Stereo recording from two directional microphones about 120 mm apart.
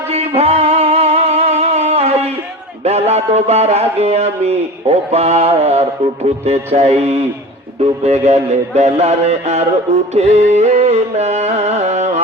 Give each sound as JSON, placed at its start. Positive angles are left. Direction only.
{"t": 0.1, "sound": "music", "side_deg": -60}
{"t": 2.8, "sound": "speech", "side_deg": -65}